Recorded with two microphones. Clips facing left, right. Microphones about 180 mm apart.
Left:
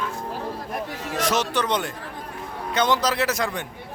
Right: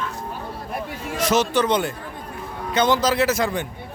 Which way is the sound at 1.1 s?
Centre (ahead or behind).